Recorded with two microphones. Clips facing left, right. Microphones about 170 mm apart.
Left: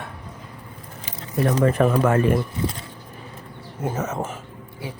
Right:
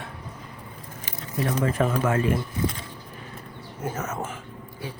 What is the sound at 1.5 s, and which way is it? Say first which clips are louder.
Speech: left 6 dB; 70° left (ahead or behind).